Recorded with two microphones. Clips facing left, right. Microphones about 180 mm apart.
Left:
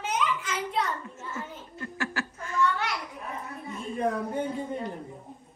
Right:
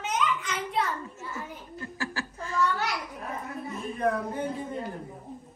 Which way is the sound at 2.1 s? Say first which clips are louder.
Even; 35° right (ahead or behind).